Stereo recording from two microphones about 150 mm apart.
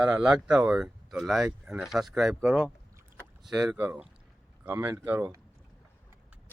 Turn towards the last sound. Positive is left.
turn(degrees=-15)  # may be behind; listen again after turning